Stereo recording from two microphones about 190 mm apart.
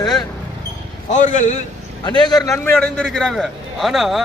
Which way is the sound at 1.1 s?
40° left (ahead or behind).